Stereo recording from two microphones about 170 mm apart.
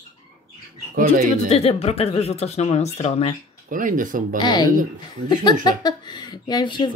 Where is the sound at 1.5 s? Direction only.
35° left (ahead or behind).